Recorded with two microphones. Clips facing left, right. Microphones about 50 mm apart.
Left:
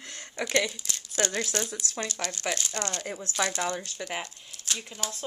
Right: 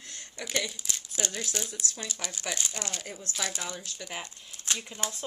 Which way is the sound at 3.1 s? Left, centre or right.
Left.